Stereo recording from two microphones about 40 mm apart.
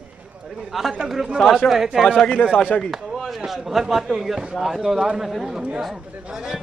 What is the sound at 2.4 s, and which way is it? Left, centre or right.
Speech, left.